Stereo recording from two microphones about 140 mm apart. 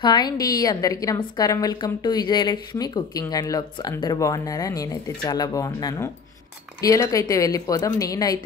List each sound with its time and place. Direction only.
0.0 s a woman's voice: 30° left (ahead or behind)